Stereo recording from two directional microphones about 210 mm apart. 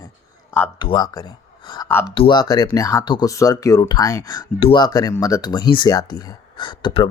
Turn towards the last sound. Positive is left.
turn(degrees=25)  # may be behind; listen again after turning